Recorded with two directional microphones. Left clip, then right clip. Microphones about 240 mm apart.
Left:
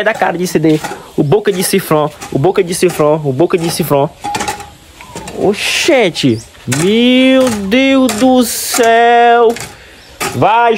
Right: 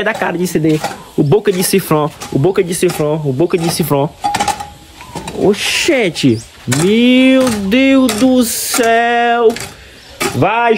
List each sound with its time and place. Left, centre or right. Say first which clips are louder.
0.0 s speech: left 3 dB; centre
5.4 s speech: even; centre